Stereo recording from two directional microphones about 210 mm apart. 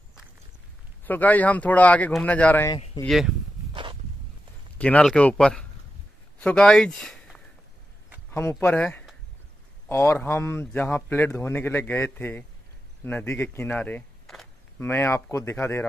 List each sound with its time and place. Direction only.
1.0 s speech: 10° left (ahead or behind)
3.1 s speech: centre (ahead or behind)
3.7 s a sound: 25° right (ahead or behind)
4.7 s speech: 5° left (ahead or behind)